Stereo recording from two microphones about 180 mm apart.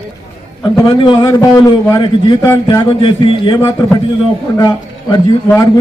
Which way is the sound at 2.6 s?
25° left (ahead or behind).